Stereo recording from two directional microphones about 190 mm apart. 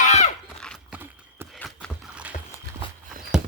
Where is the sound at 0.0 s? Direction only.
35° left (ahead or behind).